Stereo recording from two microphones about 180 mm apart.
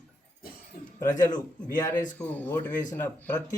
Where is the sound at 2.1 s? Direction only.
10° left (ahead or behind).